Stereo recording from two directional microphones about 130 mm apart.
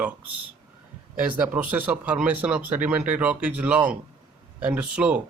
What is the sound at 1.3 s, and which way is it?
Speech, 10° right (ahead or behind).